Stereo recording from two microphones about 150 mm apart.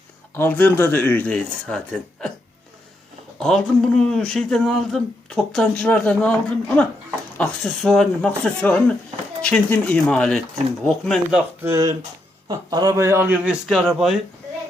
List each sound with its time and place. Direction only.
0.3 s speech: 10° left (ahead or behind)
3.3 s speech: 5° left (ahead or behind)
7.3 s speech: 5° left (ahead or behind)
11.7 s a man's voice: 20° right (ahead or behind); by 14.2 s 5° right (ahead or behind)